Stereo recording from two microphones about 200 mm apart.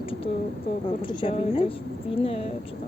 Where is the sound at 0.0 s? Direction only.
25° left (ahead or behind).